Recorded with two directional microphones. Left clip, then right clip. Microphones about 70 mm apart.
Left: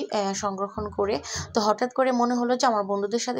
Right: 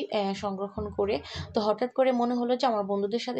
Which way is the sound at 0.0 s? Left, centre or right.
Left.